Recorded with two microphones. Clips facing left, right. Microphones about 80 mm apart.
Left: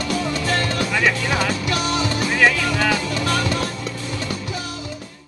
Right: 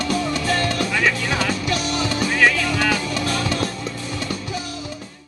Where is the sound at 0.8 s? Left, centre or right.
Centre.